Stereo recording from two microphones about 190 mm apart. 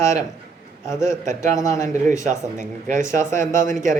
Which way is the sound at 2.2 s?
40° right (ahead or behind).